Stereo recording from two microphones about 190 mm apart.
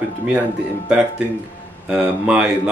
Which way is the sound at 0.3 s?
5° right (ahead or behind).